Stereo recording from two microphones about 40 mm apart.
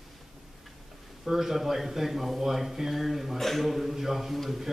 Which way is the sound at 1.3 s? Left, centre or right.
Centre.